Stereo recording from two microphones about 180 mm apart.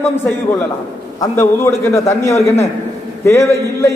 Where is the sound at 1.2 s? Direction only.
15° left (ahead or behind).